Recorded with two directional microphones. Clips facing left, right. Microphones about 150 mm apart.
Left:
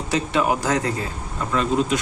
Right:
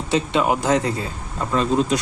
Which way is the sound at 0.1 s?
25° right (ahead or behind).